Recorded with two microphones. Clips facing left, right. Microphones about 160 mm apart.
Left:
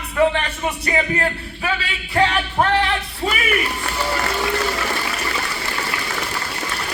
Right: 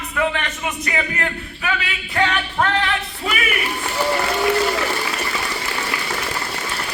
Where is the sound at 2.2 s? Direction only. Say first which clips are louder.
Left 2 dB; 30° left (ahead or behind).